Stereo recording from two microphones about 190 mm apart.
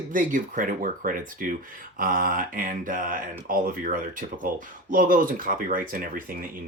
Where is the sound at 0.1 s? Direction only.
45° right (ahead or behind).